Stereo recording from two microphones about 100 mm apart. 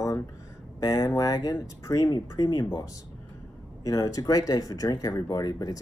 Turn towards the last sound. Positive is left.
turn(degrees=40)  # may be behind; listen again after turning